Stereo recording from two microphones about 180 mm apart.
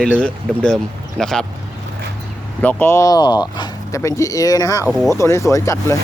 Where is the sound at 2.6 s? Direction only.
10° left (ahead or behind).